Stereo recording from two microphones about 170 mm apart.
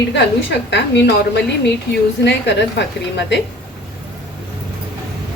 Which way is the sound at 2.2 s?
90° left.